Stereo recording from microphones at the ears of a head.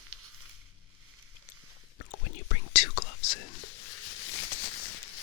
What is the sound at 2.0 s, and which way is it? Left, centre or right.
Whispering, left.